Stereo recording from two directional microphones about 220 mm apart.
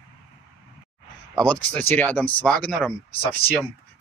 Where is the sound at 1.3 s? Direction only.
5° left (ahead or behind).